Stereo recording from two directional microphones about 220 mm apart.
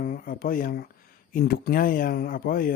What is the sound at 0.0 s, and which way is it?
Speech, 40° left (ahead or behind).